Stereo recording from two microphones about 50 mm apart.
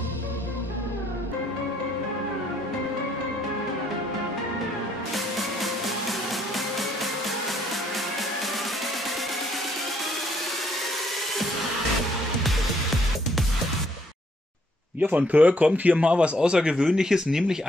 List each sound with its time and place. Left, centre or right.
5.1 s music: centre
15.0 s speech: right; by 17.6 s centre